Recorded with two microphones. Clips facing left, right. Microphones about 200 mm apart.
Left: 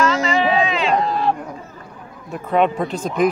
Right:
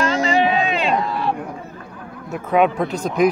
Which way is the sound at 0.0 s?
35° right (ahead or behind).